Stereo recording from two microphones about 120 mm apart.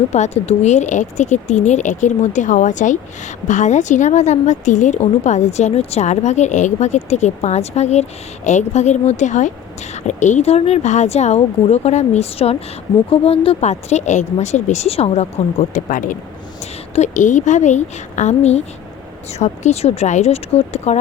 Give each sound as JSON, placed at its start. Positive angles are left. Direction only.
{"t": 0.1, "sound": "a woman's voice", "side_deg": 65}